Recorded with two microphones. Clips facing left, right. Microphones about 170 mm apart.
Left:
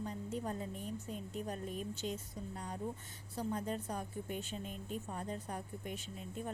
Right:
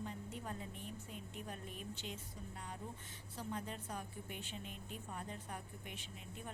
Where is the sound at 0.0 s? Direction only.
40° left (ahead or behind).